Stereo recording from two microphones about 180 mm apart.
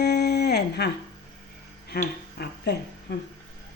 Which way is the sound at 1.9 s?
65° left (ahead or behind).